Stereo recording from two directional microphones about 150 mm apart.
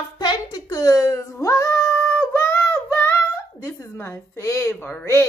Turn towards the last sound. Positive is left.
turn(degrees=15)  # may be behind; listen again after turning